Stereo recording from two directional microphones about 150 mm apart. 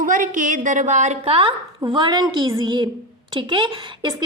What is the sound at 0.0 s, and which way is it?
A woman's voice, 60° right (ahead or behind).